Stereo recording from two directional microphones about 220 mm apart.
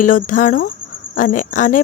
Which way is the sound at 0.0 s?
35° left (ahead or behind).